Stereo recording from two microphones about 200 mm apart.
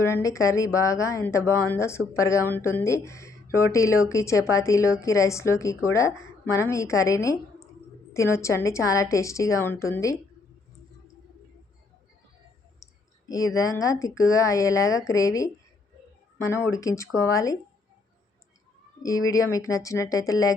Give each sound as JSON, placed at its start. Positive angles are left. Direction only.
{"t": 0.0, "sound": "speech", "side_deg": 15}
{"t": 13.2, "sound": "speech", "side_deg": 15}
{"t": 19.0, "sound": "speech", "side_deg": 15}